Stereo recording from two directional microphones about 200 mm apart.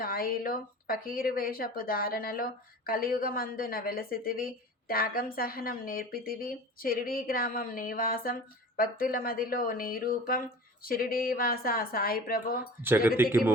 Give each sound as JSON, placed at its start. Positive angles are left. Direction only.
{"t": 0.0, "sound": "speech", "side_deg": 45}
{"t": 13.2, "sound": "speech", "side_deg": -10}